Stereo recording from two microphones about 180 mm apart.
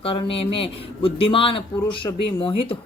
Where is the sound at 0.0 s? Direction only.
30° left (ahead or behind).